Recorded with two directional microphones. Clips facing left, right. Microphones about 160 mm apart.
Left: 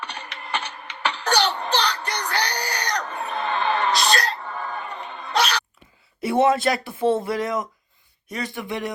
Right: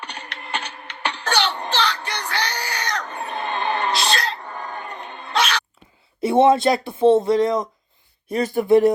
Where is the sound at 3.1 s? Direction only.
25° right (ahead or behind).